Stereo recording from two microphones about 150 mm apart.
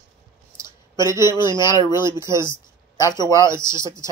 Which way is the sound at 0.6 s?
20° right (ahead or behind).